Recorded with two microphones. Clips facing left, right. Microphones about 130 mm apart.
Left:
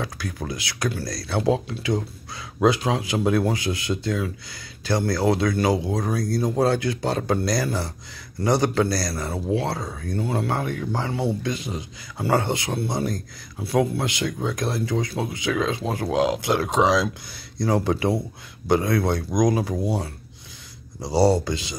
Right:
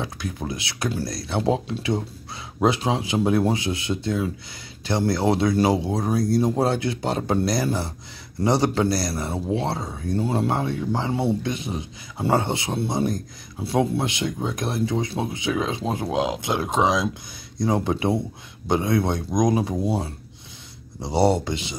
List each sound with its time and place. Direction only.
0.0 s speech: 20° right (ahead or behind)
21.0 s speech: 25° right (ahead or behind)